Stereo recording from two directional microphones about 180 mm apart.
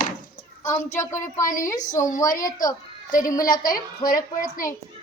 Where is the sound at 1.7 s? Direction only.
45° left (ahead or behind).